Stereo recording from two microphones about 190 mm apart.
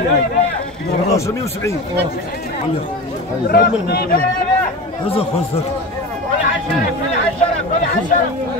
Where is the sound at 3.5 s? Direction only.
55° left (ahead or behind).